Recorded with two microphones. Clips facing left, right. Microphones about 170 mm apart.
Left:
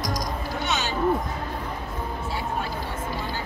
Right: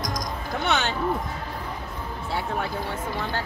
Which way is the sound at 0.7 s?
60° right (ahead or behind).